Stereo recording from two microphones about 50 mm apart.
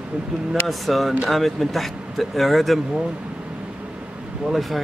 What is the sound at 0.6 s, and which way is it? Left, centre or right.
Speech, centre.